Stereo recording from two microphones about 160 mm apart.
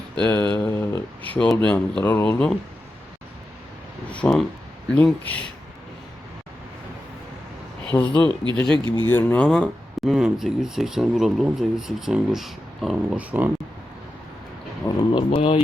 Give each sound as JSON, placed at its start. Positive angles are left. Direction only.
{"t": 0.3, "sound": "speech", "side_deg": 10}
{"t": 4.1, "sound": "speech", "side_deg": 5}
{"t": 7.9, "sound": "speech", "side_deg": 10}
{"t": 8.7, "sound": "speech", "side_deg": -30}
{"t": 9.0, "sound": "speech", "side_deg": 10}
{"t": 14.8, "sound": "speech", "side_deg": 30}